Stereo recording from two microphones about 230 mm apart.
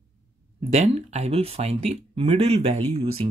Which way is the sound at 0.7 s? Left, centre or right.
Right.